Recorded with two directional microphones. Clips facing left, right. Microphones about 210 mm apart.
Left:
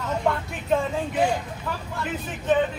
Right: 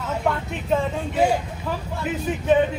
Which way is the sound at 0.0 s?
5° right (ahead or behind).